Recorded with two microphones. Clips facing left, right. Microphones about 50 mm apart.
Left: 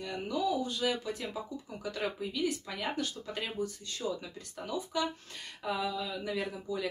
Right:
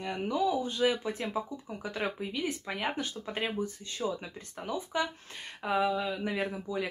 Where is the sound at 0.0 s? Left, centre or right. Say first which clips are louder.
Right 3 dB; right.